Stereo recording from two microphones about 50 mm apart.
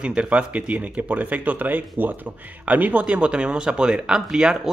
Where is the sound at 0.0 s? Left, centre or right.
Right.